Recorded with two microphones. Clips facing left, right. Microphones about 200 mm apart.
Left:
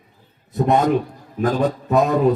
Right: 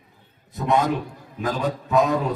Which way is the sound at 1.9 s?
45° left (ahead or behind).